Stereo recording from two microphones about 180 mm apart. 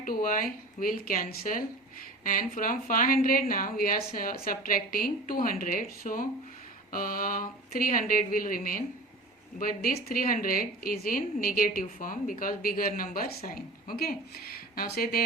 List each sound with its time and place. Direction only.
0.0 s a woman's voice: 50° left (ahead or behind)